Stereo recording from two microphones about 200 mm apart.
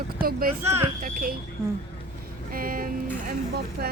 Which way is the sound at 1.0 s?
40° right (ahead or behind).